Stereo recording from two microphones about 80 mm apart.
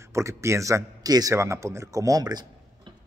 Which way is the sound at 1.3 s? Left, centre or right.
Right.